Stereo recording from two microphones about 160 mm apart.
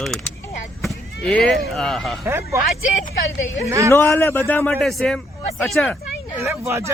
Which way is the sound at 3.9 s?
15° left (ahead or behind).